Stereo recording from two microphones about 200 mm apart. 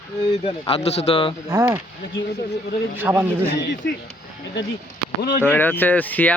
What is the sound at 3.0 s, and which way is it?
Speech, 10° right (ahead or behind).